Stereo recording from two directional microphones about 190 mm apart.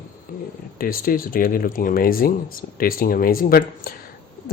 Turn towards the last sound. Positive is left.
turn(degrees=50)  # may be behind; listen again after turning